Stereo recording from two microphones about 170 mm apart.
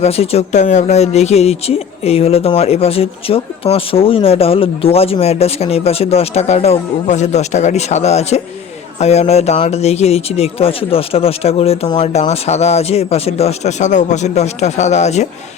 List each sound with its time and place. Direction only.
0.0 s speech: 35° left (ahead or behind)